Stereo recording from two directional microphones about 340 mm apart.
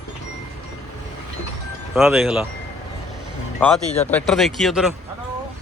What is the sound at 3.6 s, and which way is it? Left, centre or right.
Speech, centre.